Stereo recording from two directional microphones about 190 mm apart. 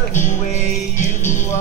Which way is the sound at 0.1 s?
40° left (ahead or behind).